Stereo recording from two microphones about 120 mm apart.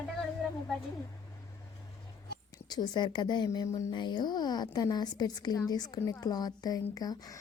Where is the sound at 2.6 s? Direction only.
35° left (ahead or behind).